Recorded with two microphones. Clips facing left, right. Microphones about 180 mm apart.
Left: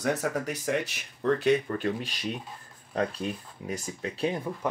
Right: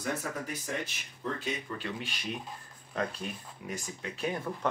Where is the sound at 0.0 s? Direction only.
70° left (ahead or behind); by 2.1 s 40° left (ahead or behind).